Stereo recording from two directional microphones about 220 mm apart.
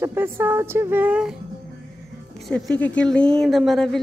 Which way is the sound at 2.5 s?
5° left (ahead or behind).